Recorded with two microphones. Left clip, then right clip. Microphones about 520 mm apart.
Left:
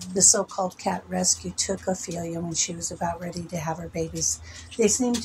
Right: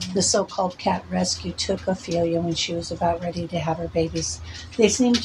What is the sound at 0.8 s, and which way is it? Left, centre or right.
Speech, left.